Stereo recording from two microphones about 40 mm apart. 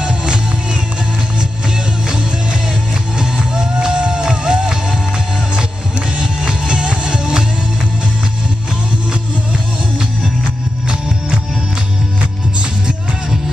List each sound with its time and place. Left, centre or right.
0.0 s music: right
3.2 s music: right
6.1 s music: right